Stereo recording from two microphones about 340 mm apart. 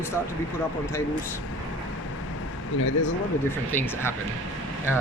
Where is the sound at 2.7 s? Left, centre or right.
Left.